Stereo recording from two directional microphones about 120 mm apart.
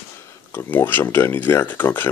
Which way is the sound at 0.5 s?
15° left (ahead or behind).